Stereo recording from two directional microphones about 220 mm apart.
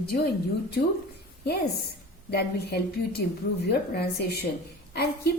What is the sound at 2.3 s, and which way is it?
A woman's voice, 45° left (ahead or behind).